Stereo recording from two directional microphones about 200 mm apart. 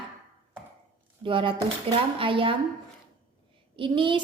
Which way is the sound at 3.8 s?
25° right (ahead or behind).